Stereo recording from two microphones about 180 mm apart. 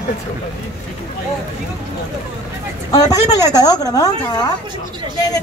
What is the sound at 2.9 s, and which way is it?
Speech, 20° left (ahead or behind).